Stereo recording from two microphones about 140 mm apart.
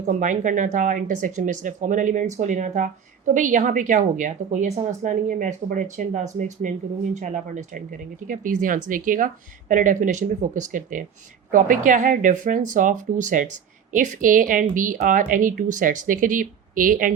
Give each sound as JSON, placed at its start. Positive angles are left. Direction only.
{"t": 0.0, "sound": "speech", "side_deg": -65}